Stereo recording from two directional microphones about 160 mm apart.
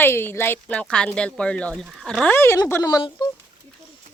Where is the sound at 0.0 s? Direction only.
15° left (ahead or behind).